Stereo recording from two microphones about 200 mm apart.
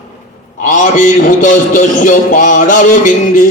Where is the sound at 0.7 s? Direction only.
40° left (ahead or behind).